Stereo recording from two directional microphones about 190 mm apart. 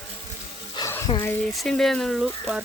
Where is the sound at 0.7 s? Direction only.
15° left (ahead or behind).